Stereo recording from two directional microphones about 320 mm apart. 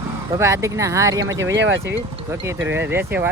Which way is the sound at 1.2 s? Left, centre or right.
Right.